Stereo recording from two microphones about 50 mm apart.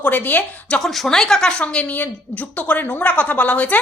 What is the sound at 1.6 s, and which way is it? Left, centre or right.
A woman's voice, left.